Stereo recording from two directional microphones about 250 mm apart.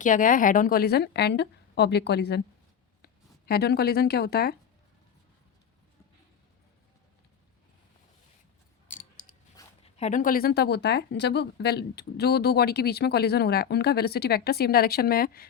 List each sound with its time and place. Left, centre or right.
0.0 s speech: left
8.9 s a sound: left
9.6 s speech: left